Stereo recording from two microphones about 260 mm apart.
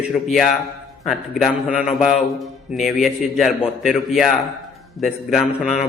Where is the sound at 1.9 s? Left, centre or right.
Left.